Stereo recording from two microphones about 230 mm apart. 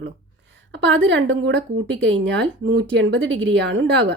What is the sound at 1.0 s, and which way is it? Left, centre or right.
Speech, right.